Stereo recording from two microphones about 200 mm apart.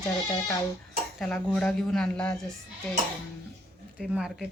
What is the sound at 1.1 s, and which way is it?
A woman's voice, 5° left (ahead or behind).